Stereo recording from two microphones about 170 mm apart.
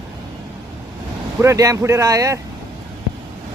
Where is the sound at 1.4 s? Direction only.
20° right (ahead or behind).